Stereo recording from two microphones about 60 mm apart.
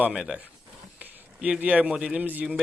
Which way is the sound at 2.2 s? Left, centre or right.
Right.